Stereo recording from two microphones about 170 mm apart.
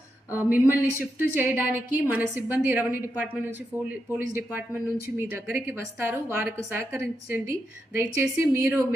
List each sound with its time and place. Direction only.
0.3 s a woman's voice: 10° right (ahead or behind)